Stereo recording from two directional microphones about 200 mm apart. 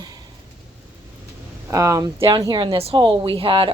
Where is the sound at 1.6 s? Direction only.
15° right (ahead or behind).